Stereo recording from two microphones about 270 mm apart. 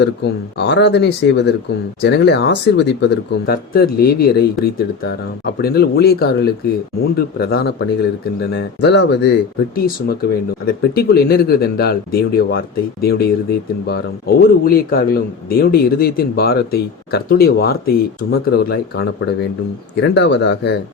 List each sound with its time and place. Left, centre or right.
0.0 s a man's voice: left
5.6 s a man's voice: left